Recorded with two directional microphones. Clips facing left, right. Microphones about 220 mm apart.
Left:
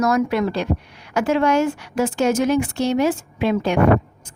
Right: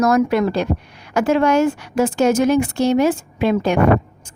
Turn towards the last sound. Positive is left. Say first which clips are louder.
# right 2 dB
turn(degrees=-45)  # may be behind; listen again after turning